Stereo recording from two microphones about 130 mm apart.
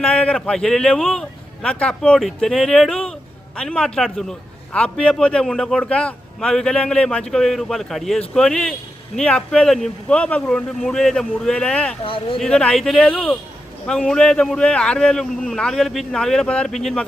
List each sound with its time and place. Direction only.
0.0 s a man's voice: 5° left (ahead or behind)
12.0 s speech: 40° left (ahead or behind)
12.4 s a man's voice: 5° left (ahead or behind)